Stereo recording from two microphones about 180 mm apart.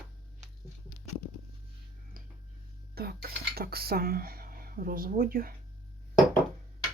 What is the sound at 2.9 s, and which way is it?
Dishes, 60° right (ahead or behind).